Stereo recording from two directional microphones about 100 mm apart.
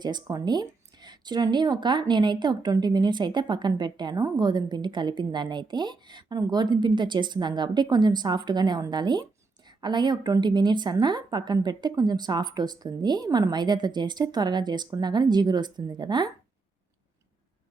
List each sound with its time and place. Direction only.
0.0 s a woman's voice: 45° right (ahead or behind)